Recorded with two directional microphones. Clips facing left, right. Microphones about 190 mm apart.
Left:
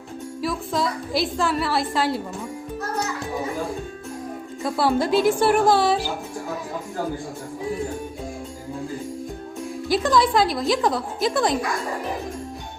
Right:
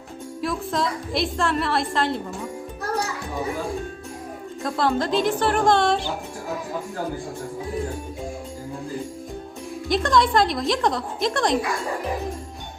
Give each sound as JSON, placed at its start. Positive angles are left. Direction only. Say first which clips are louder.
{"t": 0.4, "sound": "a woman's voice", "louder": "even", "side_deg": 0}
{"t": 4.6, "sound": "a woman's voice", "louder": "left 2 dB", "side_deg": 10}
{"t": 9.9, "sound": "a woman's voice", "louder": "even", "side_deg": 5}